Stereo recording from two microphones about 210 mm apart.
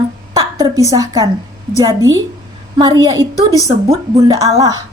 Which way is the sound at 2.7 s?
20° right (ahead or behind).